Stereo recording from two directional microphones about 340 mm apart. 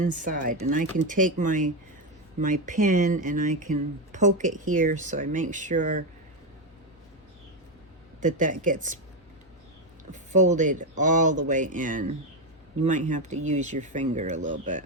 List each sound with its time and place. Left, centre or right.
0.0 s speech: right
8.2 s speech: right
10.1 s speech: right